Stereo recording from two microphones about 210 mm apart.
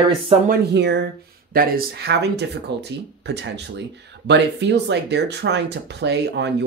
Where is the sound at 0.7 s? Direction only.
55° right (ahead or behind).